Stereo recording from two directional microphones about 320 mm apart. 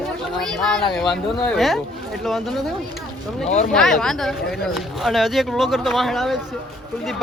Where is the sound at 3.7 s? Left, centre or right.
Centre.